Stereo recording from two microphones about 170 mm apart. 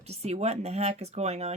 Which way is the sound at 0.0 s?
40° right (ahead or behind).